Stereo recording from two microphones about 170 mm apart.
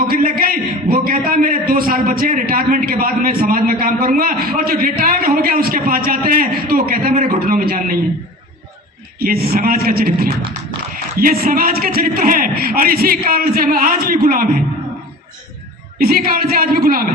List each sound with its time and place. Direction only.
0.1 s a man's voice: 60° right (ahead or behind)
9.1 s a man's voice: 60° right (ahead or behind)
16.0 s a man's voice: 60° right (ahead or behind)